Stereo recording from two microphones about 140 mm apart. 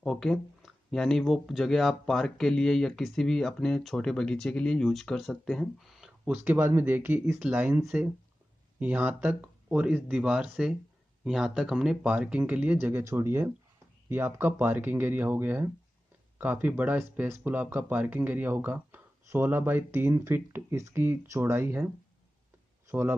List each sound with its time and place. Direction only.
0.0 s a man's voice: 5° left (ahead or behind); by 23.1 s 15° right (ahead or behind)